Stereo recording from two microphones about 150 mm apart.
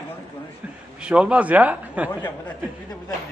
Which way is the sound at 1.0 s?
5° right (ahead or behind).